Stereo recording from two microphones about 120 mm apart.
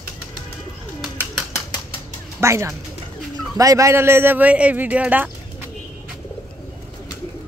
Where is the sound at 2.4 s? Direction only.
25° right (ahead or behind).